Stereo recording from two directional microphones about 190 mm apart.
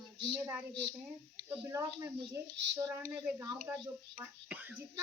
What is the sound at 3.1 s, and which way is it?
Speech, 15° right (ahead or behind).